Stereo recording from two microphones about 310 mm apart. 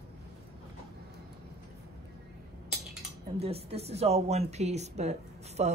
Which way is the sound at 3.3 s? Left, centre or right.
Centre.